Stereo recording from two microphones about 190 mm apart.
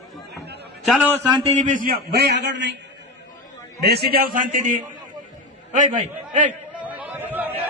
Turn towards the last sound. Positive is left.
turn(degrees=-10)  # may be behind; listen again after turning